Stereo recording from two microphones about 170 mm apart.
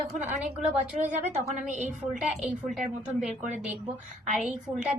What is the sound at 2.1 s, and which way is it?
A woman's voice, 5° right (ahead or behind).